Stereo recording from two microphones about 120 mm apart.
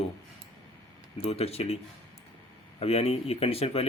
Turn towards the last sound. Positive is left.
turn(degrees=55)  # may be behind; listen again after turning